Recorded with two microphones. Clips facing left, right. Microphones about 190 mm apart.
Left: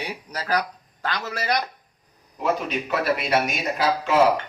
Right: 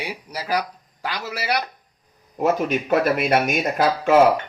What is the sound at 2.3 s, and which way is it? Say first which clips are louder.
A man's voice: right 4 dB; 50° right (ahead or behind).